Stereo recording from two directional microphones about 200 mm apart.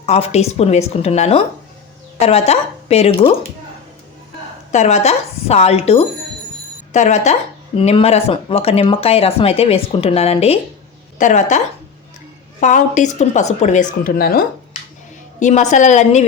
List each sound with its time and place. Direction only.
0.0 s a woman's voice: 30° left (ahead or behind)
4.7 s a woman's voice: 35° left (ahead or behind)